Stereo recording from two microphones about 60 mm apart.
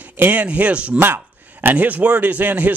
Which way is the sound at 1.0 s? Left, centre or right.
Right.